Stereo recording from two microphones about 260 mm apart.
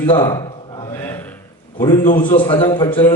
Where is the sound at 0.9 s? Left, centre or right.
Centre.